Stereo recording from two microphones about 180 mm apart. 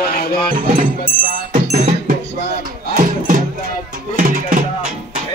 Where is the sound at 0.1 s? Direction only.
60° left (ahead or behind).